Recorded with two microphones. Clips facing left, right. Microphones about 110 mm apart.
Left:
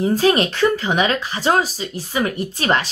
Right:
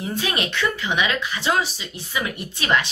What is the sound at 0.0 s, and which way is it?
Speech, 35° left (ahead or behind).